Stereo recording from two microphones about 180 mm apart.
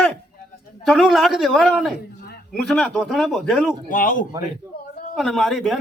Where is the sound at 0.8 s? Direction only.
Centre (ahead or behind).